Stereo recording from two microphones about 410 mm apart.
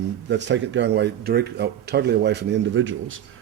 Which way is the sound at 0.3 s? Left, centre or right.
Right.